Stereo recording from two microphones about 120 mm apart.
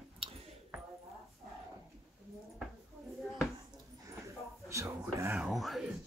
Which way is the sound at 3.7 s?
30° right (ahead or behind).